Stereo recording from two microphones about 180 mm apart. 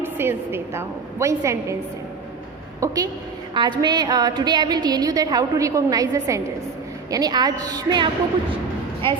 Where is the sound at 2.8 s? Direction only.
15° right (ahead or behind).